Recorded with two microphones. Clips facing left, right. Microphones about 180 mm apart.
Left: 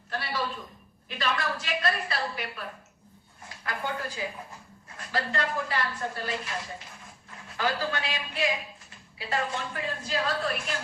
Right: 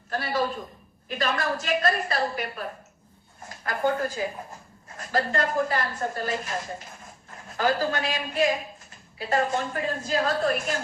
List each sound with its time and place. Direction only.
0.1 s a woman's voice: 45° right (ahead or behind)